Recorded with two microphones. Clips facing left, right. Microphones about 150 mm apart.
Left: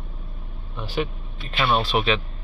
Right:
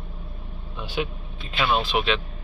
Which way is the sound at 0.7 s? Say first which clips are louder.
Left 2 dB; centre (ahead or behind).